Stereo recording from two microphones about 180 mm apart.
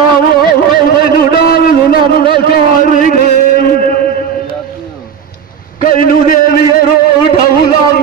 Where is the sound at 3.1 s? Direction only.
55° left (ahead or behind).